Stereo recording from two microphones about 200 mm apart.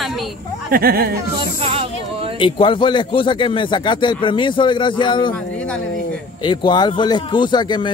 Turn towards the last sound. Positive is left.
turn(degrees=20)  # may be behind; listen again after turning